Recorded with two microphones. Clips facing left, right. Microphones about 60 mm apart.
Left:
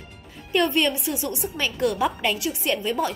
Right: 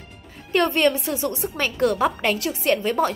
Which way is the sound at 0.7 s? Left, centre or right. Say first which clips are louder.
Right 3 dB; right.